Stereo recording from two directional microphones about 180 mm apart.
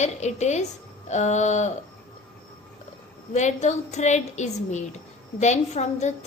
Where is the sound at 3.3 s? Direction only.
40° left (ahead or behind).